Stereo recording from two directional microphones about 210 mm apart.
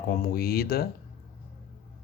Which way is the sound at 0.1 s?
45° left (ahead or behind).